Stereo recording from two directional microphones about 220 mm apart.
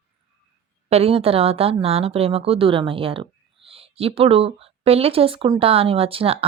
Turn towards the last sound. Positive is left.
turn(degrees=-25)  # may be behind; listen again after turning